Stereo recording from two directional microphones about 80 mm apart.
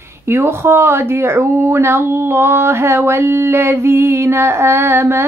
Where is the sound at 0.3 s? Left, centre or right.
Right.